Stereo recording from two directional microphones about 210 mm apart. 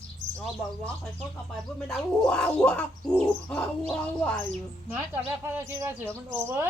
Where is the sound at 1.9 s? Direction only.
5° left (ahead or behind).